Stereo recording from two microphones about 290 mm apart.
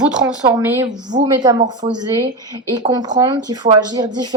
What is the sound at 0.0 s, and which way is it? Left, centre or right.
Speech, centre.